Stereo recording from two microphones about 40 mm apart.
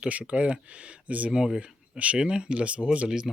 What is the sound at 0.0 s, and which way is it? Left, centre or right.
Speech, right.